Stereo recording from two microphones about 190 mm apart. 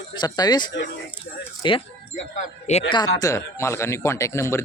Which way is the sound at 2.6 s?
35° left (ahead or behind).